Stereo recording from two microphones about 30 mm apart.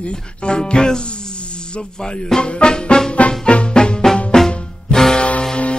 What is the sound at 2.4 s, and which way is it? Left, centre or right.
Music, left.